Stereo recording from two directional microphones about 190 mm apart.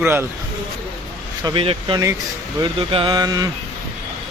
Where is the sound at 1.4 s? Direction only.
30° right (ahead or behind).